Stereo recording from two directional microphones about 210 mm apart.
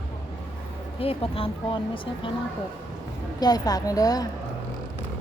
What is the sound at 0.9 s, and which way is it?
Speech, 25° left (ahead or behind).